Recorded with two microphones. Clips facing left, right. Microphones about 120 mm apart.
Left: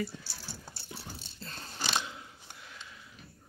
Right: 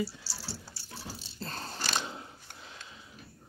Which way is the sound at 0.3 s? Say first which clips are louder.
Right 3 dB; 55° left (ahead or behind).